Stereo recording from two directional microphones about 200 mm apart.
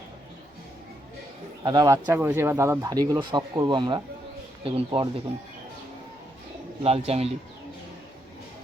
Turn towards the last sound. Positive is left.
turn(degrees=-30)  # may be behind; listen again after turning